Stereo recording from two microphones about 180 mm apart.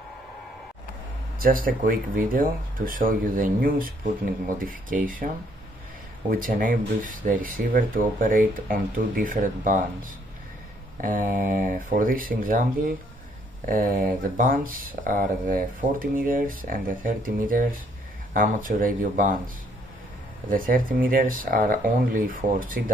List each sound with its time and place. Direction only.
1.4 s speech: 55° right (ahead or behind)
6.3 s speech: 50° right (ahead or behind)
11.0 s speech: 50° right (ahead or behind)